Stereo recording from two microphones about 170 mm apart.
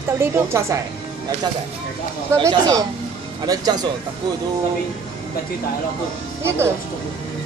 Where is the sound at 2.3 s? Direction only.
20° right (ahead or behind).